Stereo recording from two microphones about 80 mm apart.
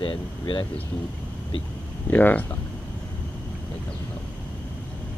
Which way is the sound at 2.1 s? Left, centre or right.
Left.